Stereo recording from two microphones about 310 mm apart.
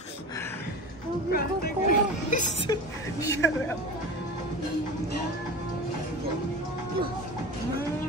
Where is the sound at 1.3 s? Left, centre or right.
Left.